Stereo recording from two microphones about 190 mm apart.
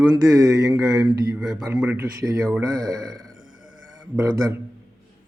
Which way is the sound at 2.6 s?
20° right (ahead or behind).